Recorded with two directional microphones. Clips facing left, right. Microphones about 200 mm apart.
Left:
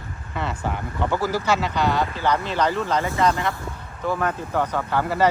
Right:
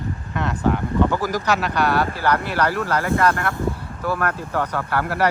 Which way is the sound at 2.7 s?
20° left (ahead or behind).